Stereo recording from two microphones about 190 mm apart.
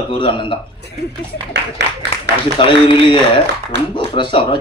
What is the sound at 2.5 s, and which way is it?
A man's voice, 25° left (ahead or behind).